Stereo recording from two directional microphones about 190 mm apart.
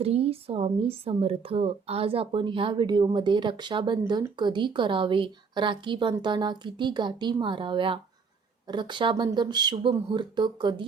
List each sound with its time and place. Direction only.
0.0 s a woman's voice: 30° right (ahead or behind)